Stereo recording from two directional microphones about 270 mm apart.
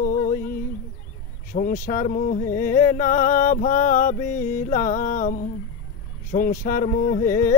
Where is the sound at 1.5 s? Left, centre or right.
Left.